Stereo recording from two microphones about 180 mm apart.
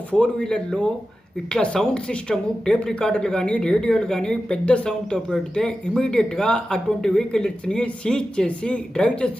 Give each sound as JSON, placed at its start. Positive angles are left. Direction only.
{"t": 0.1, "sound": "speech", "side_deg": 5}